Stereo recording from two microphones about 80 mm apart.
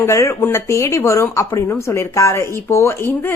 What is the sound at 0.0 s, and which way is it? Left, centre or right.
Speech, left.